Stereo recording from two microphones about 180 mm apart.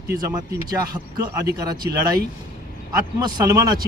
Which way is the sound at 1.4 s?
20° right (ahead or behind).